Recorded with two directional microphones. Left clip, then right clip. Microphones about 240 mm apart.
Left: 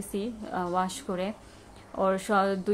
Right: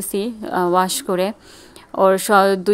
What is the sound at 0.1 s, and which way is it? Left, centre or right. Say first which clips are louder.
Speech: right 11 dB; right.